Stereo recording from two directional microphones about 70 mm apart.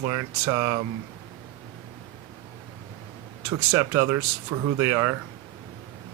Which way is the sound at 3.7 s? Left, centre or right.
Right.